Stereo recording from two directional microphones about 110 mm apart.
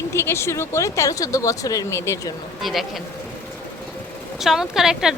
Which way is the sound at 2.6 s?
Centre (ahead or behind).